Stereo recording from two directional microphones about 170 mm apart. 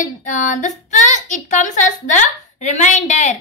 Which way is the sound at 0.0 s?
50° left (ahead or behind).